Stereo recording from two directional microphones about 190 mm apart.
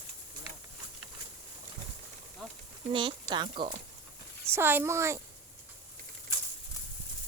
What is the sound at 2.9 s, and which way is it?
Speech, 25° right (ahead or behind).